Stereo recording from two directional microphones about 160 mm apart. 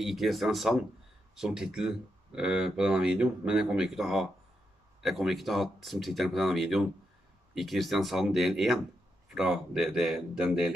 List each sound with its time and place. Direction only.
0.0 s speech: centre (ahead or behind)